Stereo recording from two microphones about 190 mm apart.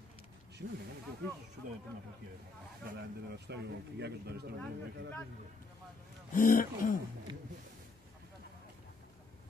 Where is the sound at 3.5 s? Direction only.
60° right (ahead or behind).